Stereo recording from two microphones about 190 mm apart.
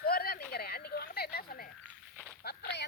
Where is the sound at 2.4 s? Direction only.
60° left (ahead or behind).